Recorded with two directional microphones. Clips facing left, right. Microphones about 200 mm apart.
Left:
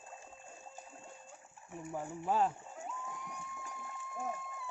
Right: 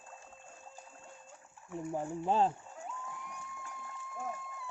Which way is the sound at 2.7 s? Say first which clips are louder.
Even; centre (ahead or behind).